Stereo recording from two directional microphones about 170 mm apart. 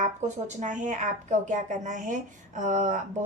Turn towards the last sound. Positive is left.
turn(degrees=-50)  # may be behind; listen again after turning